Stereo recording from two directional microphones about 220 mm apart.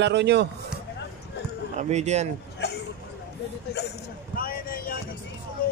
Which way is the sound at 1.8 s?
30° right (ahead or behind).